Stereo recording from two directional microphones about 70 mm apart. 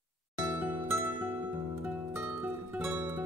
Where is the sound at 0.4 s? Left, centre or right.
Right.